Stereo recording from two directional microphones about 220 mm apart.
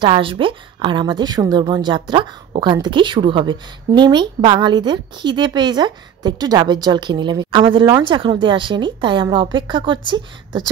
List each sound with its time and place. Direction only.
0.0 s a woman's voice: 25° right (ahead or behind)